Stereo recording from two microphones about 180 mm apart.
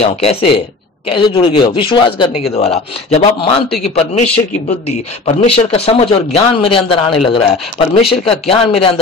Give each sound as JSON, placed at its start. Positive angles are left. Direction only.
{"t": 0.2, "sound": "speech", "side_deg": 35}